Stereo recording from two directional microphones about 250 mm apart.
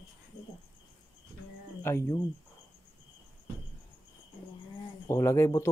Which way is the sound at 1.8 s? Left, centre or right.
Centre.